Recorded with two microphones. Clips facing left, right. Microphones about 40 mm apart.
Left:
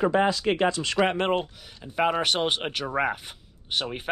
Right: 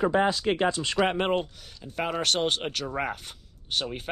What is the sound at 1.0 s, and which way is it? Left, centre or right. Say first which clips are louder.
Speech: left 2 dB; left.